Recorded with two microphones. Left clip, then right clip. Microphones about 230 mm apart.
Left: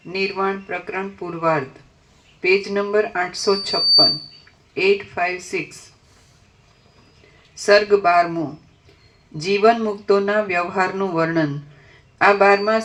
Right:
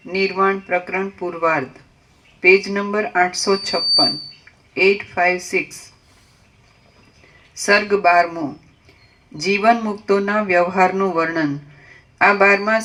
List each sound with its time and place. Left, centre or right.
0.1 s speech: right
7.6 s speech: right
9.4 s speech: right